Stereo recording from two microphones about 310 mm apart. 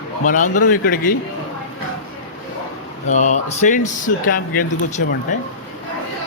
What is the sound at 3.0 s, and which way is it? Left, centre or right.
Speech, left.